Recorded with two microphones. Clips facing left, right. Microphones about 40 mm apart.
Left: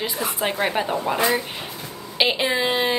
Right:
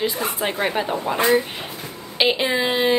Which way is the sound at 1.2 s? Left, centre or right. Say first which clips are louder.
Right 6 dB; right.